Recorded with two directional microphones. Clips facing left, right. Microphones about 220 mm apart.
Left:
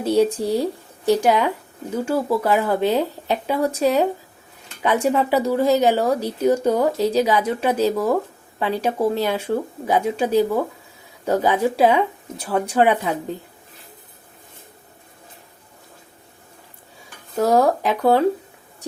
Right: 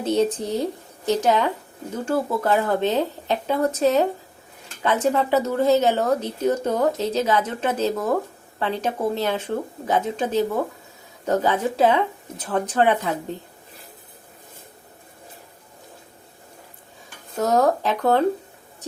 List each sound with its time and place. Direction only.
0.0 s a woman's voice: 10° left (ahead or behind)
17.3 s a woman's voice: 10° left (ahead or behind)